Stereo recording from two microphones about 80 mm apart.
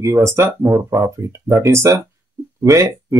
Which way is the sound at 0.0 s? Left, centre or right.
Right.